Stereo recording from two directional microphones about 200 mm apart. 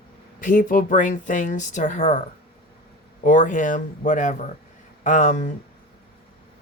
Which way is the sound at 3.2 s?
40° left (ahead or behind).